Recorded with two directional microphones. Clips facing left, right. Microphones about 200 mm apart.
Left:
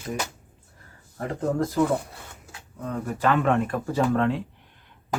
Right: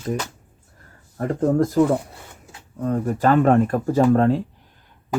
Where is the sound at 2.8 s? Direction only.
40° right (ahead or behind).